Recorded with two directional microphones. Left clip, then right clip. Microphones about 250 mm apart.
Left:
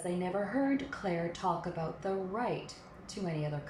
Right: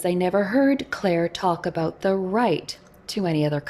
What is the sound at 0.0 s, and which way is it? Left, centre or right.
Speech, right.